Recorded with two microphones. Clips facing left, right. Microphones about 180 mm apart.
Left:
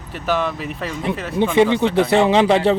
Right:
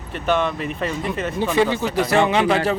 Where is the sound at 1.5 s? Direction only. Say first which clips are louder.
Left 5 dB; 20° left (ahead or behind).